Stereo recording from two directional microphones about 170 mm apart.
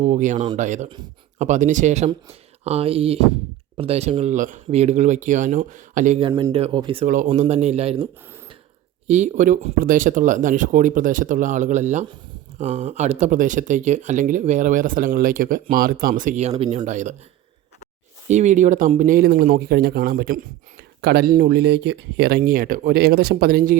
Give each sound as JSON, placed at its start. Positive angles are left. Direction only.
{"t": 0.0, "sound": "speech", "side_deg": -45}
{"t": 6.1, "sound": "speech", "side_deg": -30}
{"t": 7.0, "sound": "speech", "side_deg": -50}
{"t": 7.3, "sound": "speech", "side_deg": -40}
{"t": 9.0, "sound": "speech", "side_deg": -40}
{"t": 18.3, "sound": "speech", "side_deg": -45}